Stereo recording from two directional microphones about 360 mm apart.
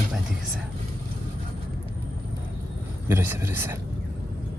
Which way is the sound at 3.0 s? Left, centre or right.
Centre.